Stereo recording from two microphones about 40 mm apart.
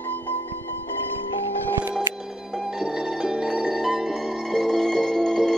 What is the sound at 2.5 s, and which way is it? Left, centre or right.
Music, centre.